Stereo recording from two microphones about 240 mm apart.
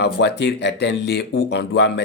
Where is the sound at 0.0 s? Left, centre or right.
Left.